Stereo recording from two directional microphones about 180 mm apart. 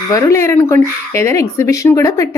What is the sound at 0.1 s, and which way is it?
A woman's voice, 15° left (ahead or behind).